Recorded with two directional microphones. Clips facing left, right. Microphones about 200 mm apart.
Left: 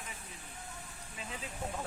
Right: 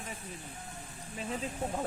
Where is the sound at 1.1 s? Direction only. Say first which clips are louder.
Right 8 dB; 40° right (ahead or behind).